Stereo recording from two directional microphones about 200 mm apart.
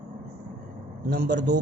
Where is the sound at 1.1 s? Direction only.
55° right (ahead or behind).